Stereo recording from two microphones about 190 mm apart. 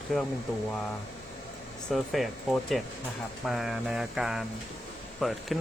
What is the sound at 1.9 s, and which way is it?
Speech, centre (ahead or behind).